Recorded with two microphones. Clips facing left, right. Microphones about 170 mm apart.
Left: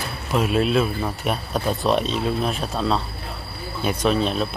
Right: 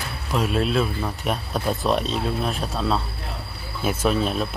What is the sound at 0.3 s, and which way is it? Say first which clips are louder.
Speech: left 3 dB; 5° left (ahead or behind).